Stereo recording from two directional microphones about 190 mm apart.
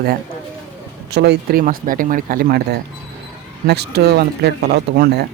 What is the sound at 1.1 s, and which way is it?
Speech, 65° right (ahead or behind).